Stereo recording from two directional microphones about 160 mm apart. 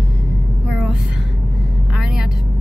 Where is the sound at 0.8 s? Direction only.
5° right (ahead or behind).